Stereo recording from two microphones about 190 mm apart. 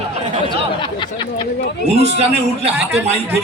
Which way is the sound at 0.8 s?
25° left (ahead or behind).